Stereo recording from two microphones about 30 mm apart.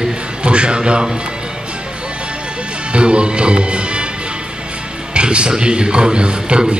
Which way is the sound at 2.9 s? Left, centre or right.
Right.